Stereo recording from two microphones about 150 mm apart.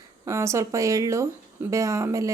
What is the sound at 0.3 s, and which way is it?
Speech, 20° right (ahead or behind).